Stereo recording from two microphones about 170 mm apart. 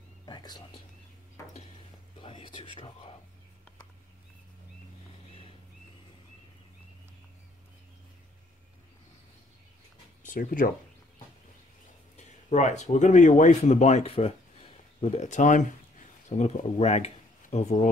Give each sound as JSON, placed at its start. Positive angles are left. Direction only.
{"t": 0.2, "sound": "whispering", "side_deg": 25}
{"t": 2.1, "sound": "whispering", "side_deg": 30}
{"t": 10.2, "sound": "speech", "side_deg": 50}
{"t": 12.2, "sound": "speech", "side_deg": 40}